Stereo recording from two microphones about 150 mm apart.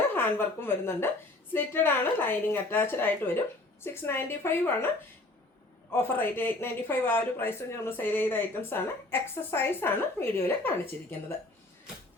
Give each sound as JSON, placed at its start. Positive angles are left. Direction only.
{"t": 0.1, "sound": "speech", "side_deg": 15}
{"t": 5.9, "sound": "speech", "side_deg": 15}